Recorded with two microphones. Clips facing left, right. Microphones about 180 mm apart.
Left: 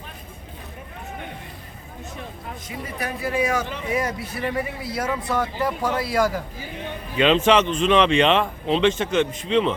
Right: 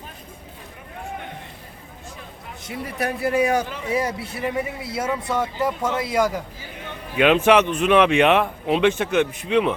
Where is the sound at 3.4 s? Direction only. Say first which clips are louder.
Right 2 dB; 35° right (ahead or behind).